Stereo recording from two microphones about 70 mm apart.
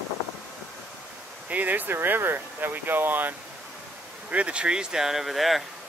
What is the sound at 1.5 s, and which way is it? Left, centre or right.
Speech, right.